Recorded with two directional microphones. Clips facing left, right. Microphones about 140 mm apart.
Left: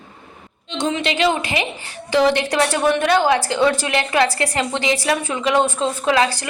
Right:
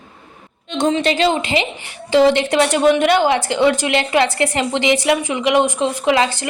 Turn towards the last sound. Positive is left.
turn(degrees=-25)  # may be behind; listen again after turning